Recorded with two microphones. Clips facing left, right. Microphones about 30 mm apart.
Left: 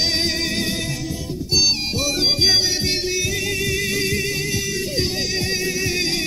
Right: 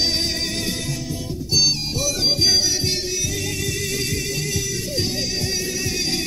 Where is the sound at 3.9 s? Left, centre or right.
Left.